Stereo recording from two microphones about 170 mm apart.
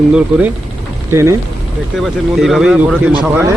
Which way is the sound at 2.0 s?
Centre (ahead or behind).